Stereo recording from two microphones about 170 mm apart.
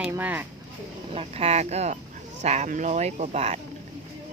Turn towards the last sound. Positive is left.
turn(degrees=-40)  # may be behind; listen again after turning